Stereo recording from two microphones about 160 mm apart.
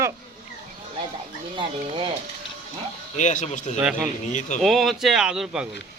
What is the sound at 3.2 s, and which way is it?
Speech, 50° left (ahead or behind).